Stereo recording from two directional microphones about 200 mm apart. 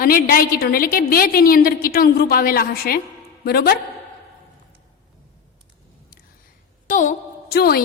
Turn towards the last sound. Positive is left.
turn(degrees=50)  # may be behind; listen again after turning